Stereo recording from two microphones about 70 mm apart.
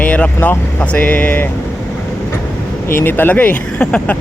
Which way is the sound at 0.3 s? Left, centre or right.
Left.